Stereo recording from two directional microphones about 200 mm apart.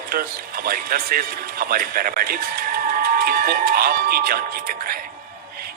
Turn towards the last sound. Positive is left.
turn(degrees=-45)  # may be behind; listen again after turning